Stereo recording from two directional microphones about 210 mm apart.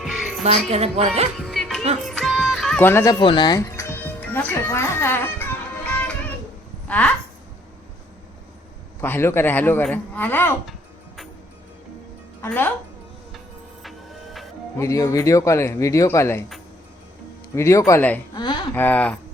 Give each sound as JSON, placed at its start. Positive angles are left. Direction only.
{"t": 0.0, "sound": "music", "side_deg": 0}
{"t": 0.7, "sound": "a woman's voice", "side_deg": -30}
{"t": 1.4, "sound": "music", "side_deg": 0}
{"t": 6.8, "sound": "speech", "side_deg": 5}
{"t": 9.0, "sound": "speech", "side_deg": 10}
{"t": 12.4, "sound": "speech", "side_deg": 10}
{"t": 13.8, "sound": "music", "side_deg": 0}
{"t": 14.8, "sound": "speech", "side_deg": 15}
{"t": 17.5, "sound": "speech", "side_deg": 15}
{"t": 18.3, "sound": "a sound", "side_deg": 20}
{"t": 18.7, "sound": "speech", "side_deg": 10}